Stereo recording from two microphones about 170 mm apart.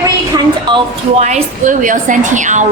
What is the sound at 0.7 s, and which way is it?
Speech, 40° right (ahead or behind).